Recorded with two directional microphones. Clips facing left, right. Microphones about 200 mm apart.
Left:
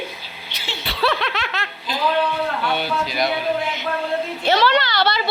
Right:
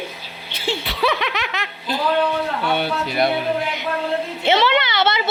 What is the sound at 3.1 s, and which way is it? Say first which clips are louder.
Speech: right 5 dB; 60° right (ahead or behind).